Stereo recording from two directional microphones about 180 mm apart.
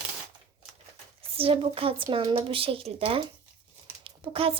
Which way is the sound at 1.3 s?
30° right (ahead or behind).